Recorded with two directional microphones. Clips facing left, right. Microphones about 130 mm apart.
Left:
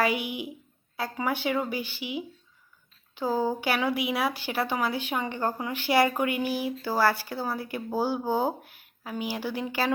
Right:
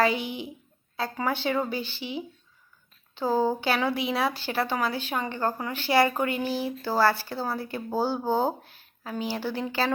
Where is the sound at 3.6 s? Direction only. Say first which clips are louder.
Right 1 dB; 10° left (ahead or behind).